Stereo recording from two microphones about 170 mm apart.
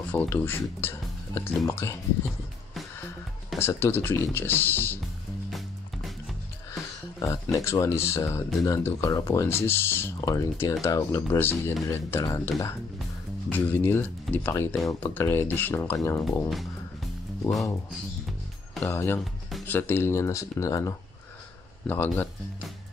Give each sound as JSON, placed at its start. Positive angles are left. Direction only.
{"t": 0.1, "sound": "speech", "side_deg": 10}
{"t": 3.5, "sound": "speech", "side_deg": 15}
{"t": 7.5, "sound": "speech", "side_deg": 15}
{"t": 16.4, "sound": "music", "side_deg": 0}
{"t": 18.9, "sound": "speech", "side_deg": 15}